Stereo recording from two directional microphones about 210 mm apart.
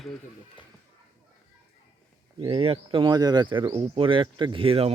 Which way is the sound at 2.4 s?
25° right (ahead or behind).